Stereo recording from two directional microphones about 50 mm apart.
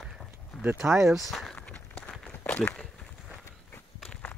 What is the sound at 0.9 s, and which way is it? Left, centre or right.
Speech, right.